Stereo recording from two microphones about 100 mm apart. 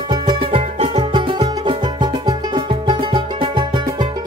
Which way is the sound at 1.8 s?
45° right (ahead or behind).